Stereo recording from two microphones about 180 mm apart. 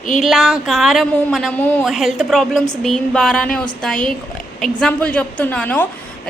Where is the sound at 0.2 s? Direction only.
Centre (ahead or behind).